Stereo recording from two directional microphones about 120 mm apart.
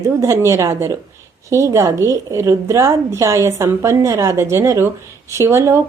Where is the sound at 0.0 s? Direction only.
25° right (ahead or behind).